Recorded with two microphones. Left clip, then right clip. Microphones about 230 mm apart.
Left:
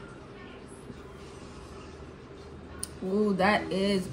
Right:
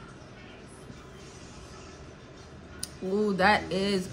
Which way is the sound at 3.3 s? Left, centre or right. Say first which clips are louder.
Right 3 dB; centre.